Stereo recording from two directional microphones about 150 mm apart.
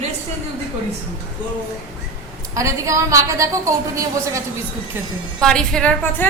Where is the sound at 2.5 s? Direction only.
20° right (ahead or behind).